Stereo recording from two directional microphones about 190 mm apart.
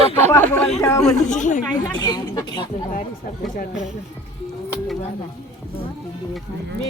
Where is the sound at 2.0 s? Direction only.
20° left (ahead or behind).